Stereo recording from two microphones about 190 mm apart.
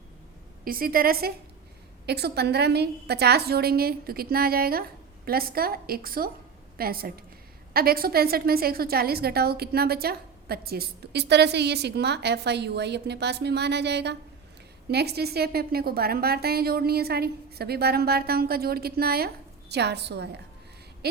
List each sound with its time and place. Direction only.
0.6 s a woman's voice: 50° right (ahead or behind)